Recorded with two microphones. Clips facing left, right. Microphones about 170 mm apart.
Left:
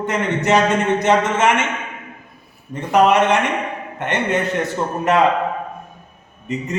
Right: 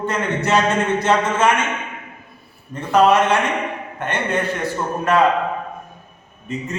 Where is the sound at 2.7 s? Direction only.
15° left (ahead or behind).